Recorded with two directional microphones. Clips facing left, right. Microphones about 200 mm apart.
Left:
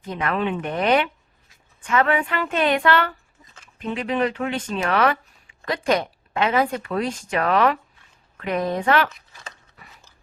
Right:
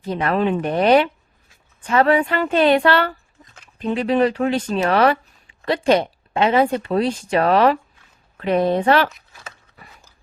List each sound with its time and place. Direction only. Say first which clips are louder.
0.0 s speech: right 5 dB; 35° right (ahead or behind)
9.0 s speech: right 2 dB; 5° right (ahead or behind)